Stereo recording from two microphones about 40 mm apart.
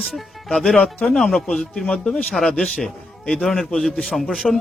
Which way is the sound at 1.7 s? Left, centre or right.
Left.